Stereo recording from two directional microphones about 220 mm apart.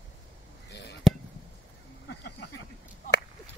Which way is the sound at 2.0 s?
50° left (ahead or behind).